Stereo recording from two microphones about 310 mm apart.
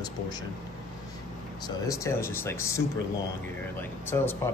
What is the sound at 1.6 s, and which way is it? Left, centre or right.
Speech, centre.